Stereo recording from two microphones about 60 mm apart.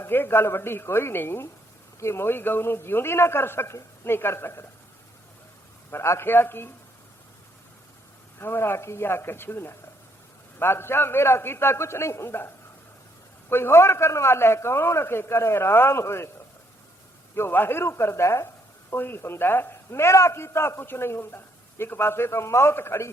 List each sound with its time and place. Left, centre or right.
0.0 s a man's voice: left
5.9 s a man's voice: left
8.4 s a man's voice: left
13.5 s a man's voice: left
17.3 s a man's voice: left
18.9 s a man's voice: left